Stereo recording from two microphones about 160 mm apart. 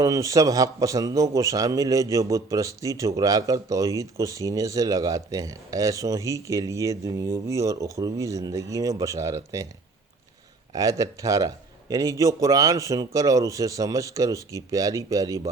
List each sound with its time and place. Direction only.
0.0 s a man's voice: 20° right (ahead or behind)
10.7 s a man's voice: 20° right (ahead or behind)